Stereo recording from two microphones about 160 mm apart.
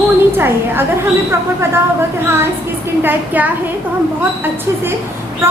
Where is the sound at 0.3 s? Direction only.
15° right (ahead or behind).